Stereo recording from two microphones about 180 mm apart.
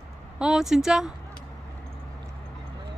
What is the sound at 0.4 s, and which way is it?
Speech, 5° right (ahead or behind).